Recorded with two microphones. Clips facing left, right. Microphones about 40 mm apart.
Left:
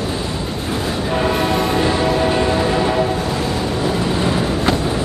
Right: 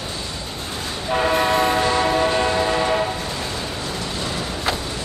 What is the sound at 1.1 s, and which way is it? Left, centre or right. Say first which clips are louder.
Train: right 1 dB; centre.